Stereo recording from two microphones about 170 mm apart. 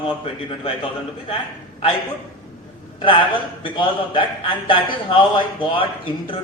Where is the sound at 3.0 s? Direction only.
30° left (ahead or behind).